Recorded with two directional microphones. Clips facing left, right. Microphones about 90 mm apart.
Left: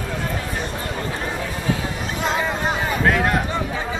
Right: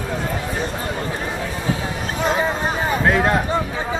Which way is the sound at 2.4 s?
25° right (ahead or behind).